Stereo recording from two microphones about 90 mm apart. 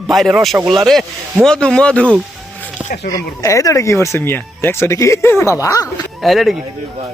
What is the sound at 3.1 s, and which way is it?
Speech, 40° left (ahead or behind).